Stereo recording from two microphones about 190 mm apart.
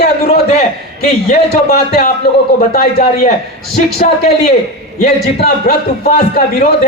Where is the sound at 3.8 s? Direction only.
40° left (ahead or behind).